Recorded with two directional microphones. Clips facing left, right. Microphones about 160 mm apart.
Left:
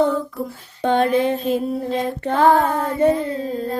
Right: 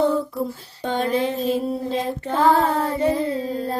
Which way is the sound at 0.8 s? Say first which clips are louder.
Left 5 dB; 60° left (ahead or behind).